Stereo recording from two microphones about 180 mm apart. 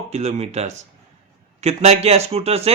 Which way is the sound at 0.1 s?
35° right (ahead or behind).